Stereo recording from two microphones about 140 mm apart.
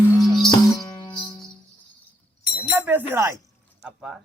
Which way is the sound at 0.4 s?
30° left (ahead or behind).